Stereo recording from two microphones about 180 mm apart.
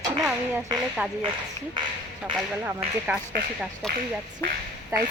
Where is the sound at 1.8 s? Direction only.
25° right (ahead or behind).